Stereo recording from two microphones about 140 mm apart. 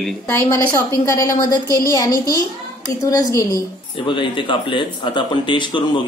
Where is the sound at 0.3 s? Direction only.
15° left (ahead or behind).